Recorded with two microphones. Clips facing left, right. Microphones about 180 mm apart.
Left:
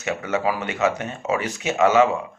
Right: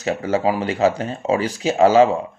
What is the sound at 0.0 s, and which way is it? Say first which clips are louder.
Speech: right 4 dB; 30° right (ahead or behind).